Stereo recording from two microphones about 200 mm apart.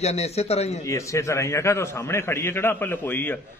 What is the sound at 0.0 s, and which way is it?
Speech, 30° left (ahead or behind).